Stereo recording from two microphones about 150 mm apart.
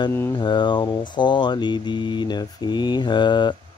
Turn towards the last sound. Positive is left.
turn(degrees=30)  # may be behind; listen again after turning